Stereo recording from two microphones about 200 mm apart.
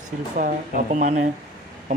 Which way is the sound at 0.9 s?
35° right (ahead or behind).